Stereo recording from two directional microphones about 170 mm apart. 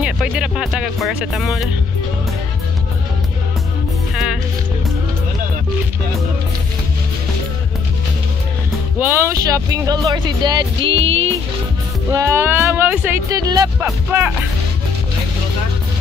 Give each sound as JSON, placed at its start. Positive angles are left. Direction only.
{"t": 0.0, "sound": "speech", "side_deg": -5}
{"t": 4.1, "sound": "music", "side_deg": 0}
{"t": 9.0, "sound": "speech", "side_deg": -15}
{"t": 12.1, "sound": "speech", "side_deg": -15}
{"t": 13.3, "sound": "speech", "side_deg": -25}
{"t": 14.1, "sound": "speech", "side_deg": -10}